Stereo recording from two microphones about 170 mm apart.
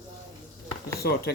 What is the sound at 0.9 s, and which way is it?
Speech, 70° left (ahead or behind).